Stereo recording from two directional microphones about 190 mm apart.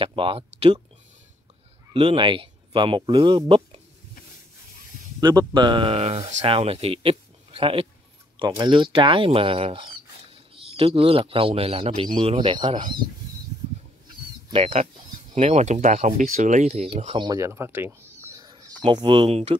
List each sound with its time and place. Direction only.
0.0 s speech: 25° right (ahead or behind)
2.0 s speech: 30° right (ahead or behind)
5.2 s speech: 20° right (ahead or behind)
14.5 s speech: 30° right (ahead or behind)